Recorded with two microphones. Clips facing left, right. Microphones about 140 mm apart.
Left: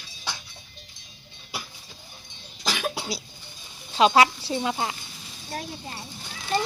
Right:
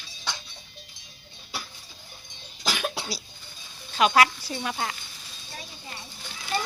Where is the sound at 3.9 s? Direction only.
25° left (ahead or behind).